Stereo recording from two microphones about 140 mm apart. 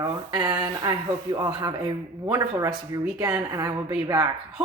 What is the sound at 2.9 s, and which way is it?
Speech, 25° right (ahead or behind).